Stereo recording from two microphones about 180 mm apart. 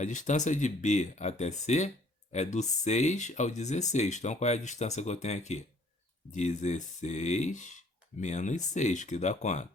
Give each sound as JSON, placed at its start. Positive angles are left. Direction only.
{"t": 0.0, "sound": "speech", "side_deg": 45}